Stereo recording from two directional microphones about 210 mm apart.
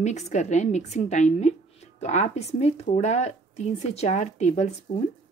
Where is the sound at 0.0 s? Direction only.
35° left (ahead or behind).